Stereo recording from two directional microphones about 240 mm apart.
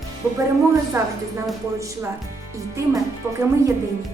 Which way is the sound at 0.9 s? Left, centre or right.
Centre.